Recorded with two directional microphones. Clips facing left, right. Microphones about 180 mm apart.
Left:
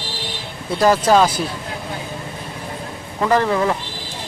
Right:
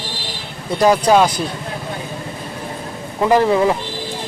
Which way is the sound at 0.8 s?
Centre (ahead or behind).